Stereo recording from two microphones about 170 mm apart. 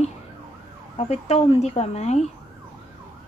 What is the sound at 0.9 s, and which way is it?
Speech, 40° left (ahead or behind).